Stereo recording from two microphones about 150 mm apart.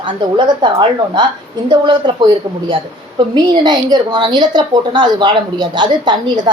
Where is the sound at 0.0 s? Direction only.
30° right (ahead or behind).